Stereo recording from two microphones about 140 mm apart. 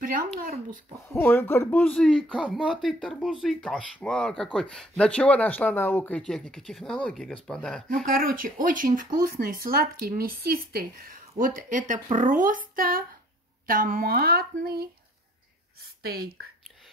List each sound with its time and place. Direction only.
0.4 s speech: 90° right
1.1 s speech: 15° left (ahead or behind)
2.3 s speech: 5° right (ahead or behind)
7.9 s speech: 90° right
16.0 s speech: 90° right